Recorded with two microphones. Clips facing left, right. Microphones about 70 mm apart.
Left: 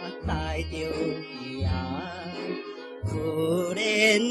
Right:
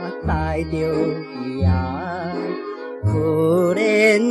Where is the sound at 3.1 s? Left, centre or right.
Right.